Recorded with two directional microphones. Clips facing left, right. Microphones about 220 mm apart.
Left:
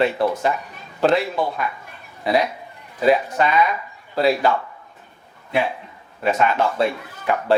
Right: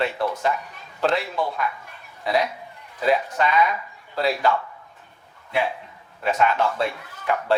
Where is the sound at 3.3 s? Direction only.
20° left (ahead or behind).